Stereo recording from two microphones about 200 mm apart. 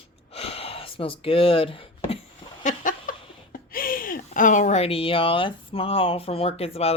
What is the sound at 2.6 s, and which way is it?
Speech, 40° left (ahead or behind).